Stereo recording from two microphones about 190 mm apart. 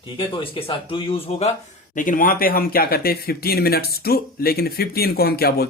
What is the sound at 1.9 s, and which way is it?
Speech, 45° left (ahead or behind).